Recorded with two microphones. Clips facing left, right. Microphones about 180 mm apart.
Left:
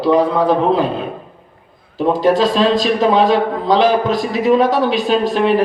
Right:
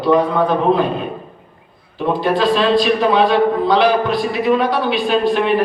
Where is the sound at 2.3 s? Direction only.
40° left (ahead or behind).